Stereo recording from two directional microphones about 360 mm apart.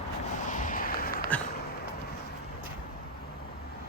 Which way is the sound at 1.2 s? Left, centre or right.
Centre.